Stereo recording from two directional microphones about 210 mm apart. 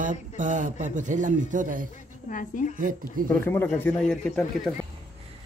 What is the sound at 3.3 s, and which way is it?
Speech, 10° left (ahead or behind).